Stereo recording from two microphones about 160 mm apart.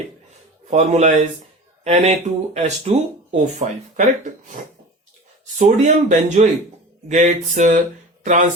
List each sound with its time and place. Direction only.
0.7 s speech: 45° right (ahead or behind)
5.5 s speech: 50° right (ahead or behind)